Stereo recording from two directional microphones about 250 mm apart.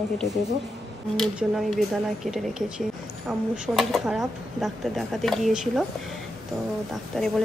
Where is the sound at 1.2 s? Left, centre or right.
Centre.